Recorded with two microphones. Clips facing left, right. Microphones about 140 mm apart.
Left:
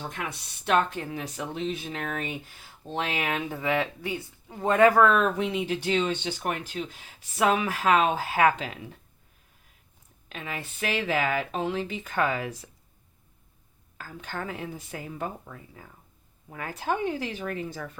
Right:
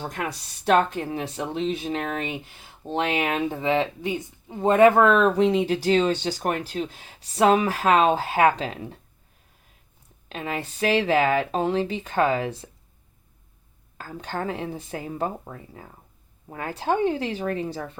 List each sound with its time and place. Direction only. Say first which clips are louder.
0.0 s speech: right 5 dB; 40° right (ahead or behind)
10.2 s speech: right 6 dB; 35° right (ahead or behind)
14.0 s speech: right 5 dB; 35° right (ahead or behind)